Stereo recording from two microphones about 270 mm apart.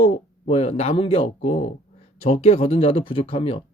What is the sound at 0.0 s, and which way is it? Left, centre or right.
Speech, left.